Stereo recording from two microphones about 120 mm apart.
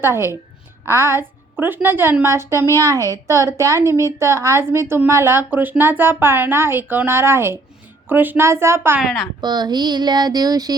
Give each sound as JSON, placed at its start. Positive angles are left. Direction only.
{"t": 0.0, "sound": "a woman's voice", "side_deg": -20}
{"t": 9.0, "sound": "a woman's voice", "side_deg": 0}
{"t": 9.4, "sound": "speech", "side_deg": -35}